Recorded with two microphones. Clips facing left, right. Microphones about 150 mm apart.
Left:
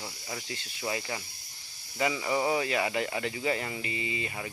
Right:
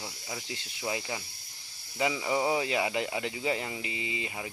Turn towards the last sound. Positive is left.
turn(degrees=-15)  # may be behind; listen again after turning